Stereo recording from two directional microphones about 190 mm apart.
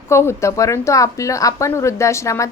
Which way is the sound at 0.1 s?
15° left (ahead or behind).